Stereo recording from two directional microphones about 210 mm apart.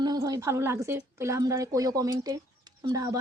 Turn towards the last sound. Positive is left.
turn(degrees=-20)  # may be behind; listen again after turning